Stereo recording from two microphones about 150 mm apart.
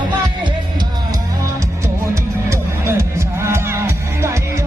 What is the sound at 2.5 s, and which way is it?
Music, 20° right (ahead or behind).